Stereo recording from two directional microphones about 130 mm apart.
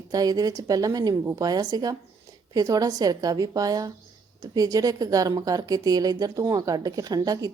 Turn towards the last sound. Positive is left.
turn(degrees=-30)  # may be behind; listen again after turning